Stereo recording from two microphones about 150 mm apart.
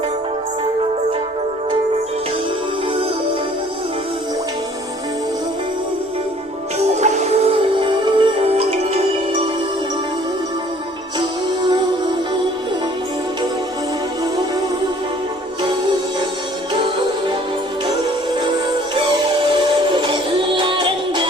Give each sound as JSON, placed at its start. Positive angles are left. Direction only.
{"t": 7.0, "sound": "music", "side_deg": -50}
{"t": 7.8, "sound": "music", "side_deg": -35}
{"t": 16.7, "sound": "music", "side_deg": -35}
{"t": 18.9, "sound": "music", "side_deg": -35}